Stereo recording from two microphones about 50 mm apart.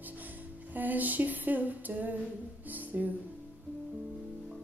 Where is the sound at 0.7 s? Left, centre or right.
Right.